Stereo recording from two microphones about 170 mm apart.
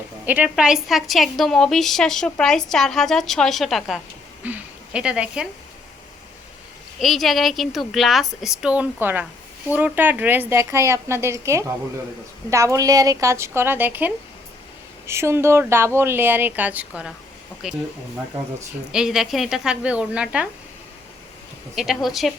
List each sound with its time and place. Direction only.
0.3 s a woman's voice: 10° right (ahead or behind)
7.0 s a woman's voice: centre (ahead or behind)
18.9 s a woman's voice: 5° right (ahead or behind)
21.8 s a woman's voice: centre (ahead or behind)